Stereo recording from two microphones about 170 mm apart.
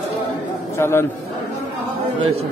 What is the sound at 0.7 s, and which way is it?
Speech, 15° left (ahead or behind).